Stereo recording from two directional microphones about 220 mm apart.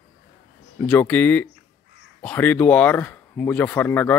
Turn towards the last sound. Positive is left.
turn(degrees=10)  # may be behind; listen again after turning